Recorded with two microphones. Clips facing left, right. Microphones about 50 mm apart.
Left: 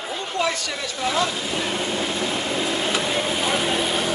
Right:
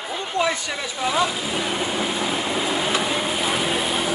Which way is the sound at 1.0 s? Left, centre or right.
Centre.